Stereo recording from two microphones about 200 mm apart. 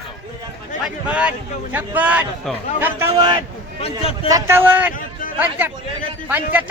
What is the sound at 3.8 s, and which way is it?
Speech, 30° left (ahead or behind).